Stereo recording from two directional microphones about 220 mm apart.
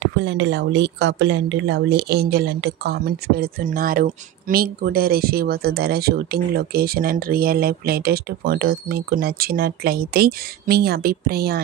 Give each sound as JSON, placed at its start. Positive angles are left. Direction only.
{"t": 0.0, "sound": "speech", "side_deg": -50}